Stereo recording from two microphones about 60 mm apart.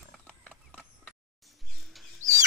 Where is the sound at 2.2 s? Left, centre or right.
Right.